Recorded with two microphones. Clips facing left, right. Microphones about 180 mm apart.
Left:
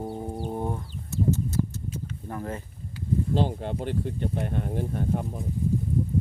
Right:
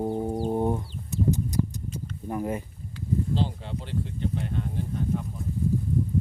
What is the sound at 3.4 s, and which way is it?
Speech, 50° left (ahead or behind).